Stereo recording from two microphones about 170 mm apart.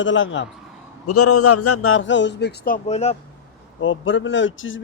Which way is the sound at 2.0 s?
90° left.